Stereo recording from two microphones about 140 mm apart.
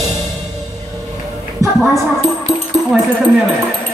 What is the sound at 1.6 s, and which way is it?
Music, 25° right (ahead or behind).